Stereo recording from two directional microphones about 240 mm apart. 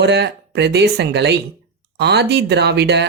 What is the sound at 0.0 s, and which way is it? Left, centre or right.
Speech, right.